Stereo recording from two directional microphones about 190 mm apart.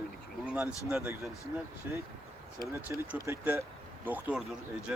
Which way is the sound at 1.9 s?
10° right (ahead or behind).